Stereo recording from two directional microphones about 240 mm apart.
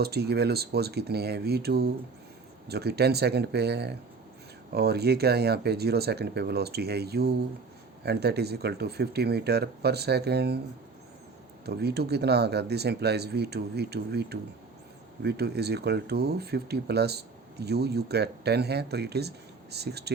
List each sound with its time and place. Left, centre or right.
0.0 s speech: right
11.6 s speech: right